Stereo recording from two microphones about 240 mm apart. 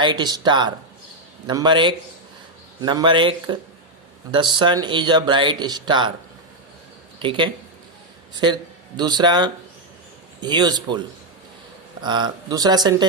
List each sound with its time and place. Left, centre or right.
0.0 s speech: centre
7.2 s a man's voice: right
12.0 s speech: centre